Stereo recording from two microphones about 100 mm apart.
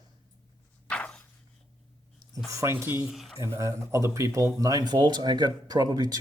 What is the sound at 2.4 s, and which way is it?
Speech, 30° right (ahead or behind).